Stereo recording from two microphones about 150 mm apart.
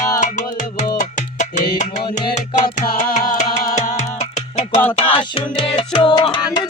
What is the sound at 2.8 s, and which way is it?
Music, 70° left (ahead or behind).